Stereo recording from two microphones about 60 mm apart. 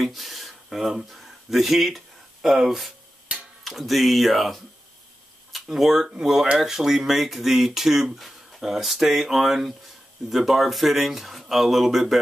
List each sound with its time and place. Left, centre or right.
0.0 s speech: centre
3.3 s a sound: centre
3.6 s speech: centre